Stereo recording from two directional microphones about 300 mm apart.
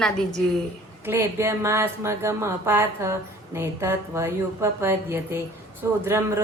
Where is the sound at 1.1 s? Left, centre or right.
Centre.